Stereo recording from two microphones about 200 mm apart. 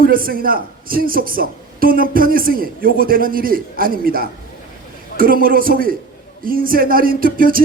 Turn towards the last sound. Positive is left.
turn(degrees=-45)  # may be behind; listen again after turning